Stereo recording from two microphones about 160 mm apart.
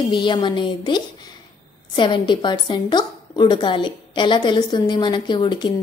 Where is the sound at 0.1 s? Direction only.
30° left (ahead or behind).